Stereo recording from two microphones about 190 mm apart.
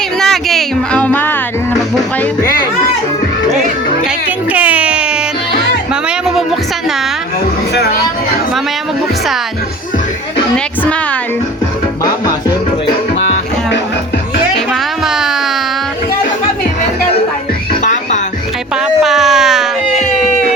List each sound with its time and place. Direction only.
0.2 s music: centre (ahead or behind)
4.0 s music: 10° right (ahead or behind)
10.8 s music: 5° left (ahead or behind)
14.7 s music: centre (ahead or behind)
17.8 s music: 40° left (ahead or behind)
18.8 s a sound: centre (ahead or behind)